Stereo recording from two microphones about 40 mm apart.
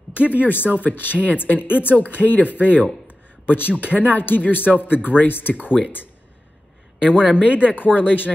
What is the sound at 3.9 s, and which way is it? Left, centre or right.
Speech, left.